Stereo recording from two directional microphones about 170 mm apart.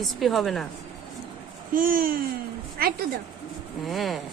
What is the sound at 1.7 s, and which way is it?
Speech, 55° right (ahead or behind).